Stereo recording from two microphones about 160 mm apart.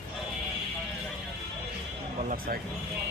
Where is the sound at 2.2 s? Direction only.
60° right (ahead or behind).